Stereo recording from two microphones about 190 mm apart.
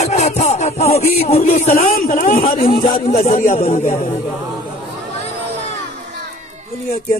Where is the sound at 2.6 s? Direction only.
30° left (ahead or behind).